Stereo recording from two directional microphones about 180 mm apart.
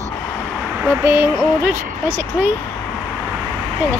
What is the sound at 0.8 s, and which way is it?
Speech, 15° right (ahead or behind).